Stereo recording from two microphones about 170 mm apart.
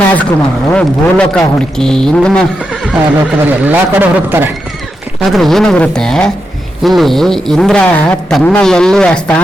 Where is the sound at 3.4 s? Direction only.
10° right (ahead or behind).